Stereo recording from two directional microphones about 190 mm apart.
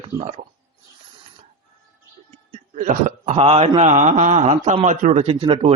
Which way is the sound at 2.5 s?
40° right (ahead or behind).